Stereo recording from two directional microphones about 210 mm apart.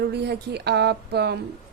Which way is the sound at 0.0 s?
50° right (ahead or behind).